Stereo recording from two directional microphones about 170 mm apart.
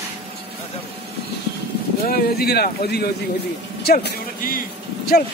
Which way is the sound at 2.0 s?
60° left (ahead or behind).